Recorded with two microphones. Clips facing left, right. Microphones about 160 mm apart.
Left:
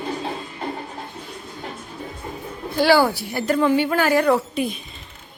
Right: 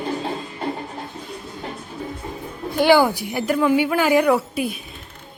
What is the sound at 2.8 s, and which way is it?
Speech, 20° right (ahead or behind).